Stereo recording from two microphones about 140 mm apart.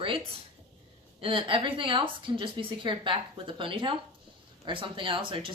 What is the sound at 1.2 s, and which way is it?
A woman's voice, 40° right (ahead or behind).